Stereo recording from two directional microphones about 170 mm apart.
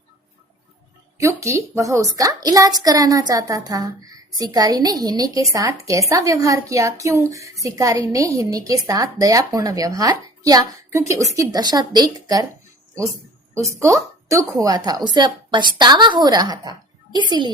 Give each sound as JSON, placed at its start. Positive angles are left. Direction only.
{"t": 1.2, "sound": "a woman's voice", "side_deg": -15}
{"t": 13.5, "sound": "a woman's voice", "side_deg": -15}